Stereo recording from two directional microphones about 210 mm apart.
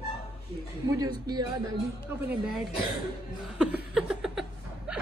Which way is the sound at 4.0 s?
Centre (ahead or behind).